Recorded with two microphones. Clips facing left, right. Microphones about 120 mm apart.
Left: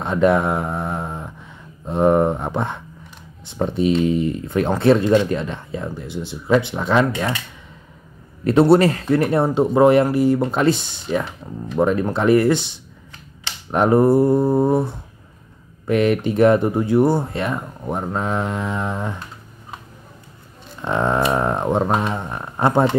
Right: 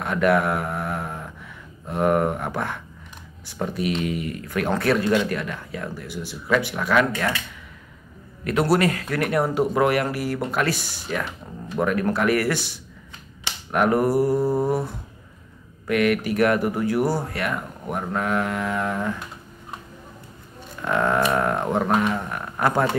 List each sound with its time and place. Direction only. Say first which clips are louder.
0.0 s speech: left 3 dB; 25° left (ahead or behind)
8.5 s speech: left 7 dB; 30° left (ahead or behind)
20.8 s speech: left 2 dB; 25° left (ahead or behind)